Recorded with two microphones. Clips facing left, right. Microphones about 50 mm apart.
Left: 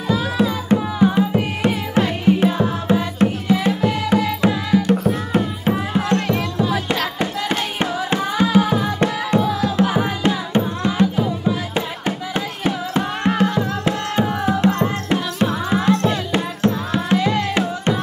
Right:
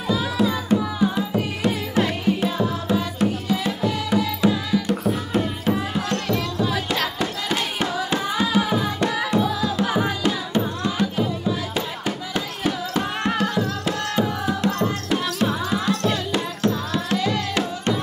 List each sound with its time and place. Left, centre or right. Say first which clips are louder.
0.4 s music: left 1 dB; left
5.3 s music: left 3 dB; left
9.8 s music: left 3 dB; left